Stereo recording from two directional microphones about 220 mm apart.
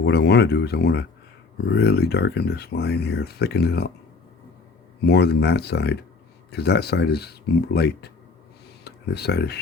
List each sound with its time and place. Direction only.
0.0 s speech: 50° left (ahead or behind)
5.0 s speech: 45° left (ahead or behind)